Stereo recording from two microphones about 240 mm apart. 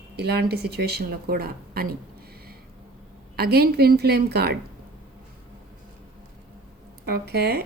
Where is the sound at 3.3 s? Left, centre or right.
Right.